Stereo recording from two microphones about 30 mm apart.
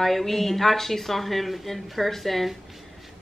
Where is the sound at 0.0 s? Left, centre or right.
Centre.